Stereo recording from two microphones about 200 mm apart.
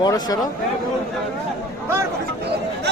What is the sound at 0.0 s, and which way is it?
Speech, 20° left (ahead or behind).